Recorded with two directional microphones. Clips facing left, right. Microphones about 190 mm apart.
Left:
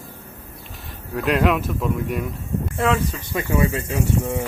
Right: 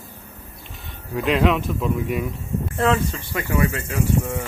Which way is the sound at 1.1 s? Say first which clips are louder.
Even; centre (ahead or behind).